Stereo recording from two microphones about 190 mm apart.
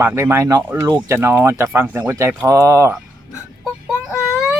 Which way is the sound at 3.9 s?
5° right (ahead or behind).